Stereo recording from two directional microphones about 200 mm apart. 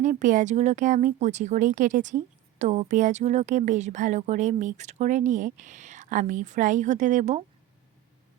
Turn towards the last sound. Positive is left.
turn(degrees=-35)  # may be behind; listen again after turning